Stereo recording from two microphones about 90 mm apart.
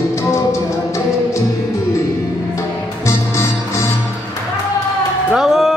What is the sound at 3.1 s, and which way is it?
Music, 30° left (ahead or behind).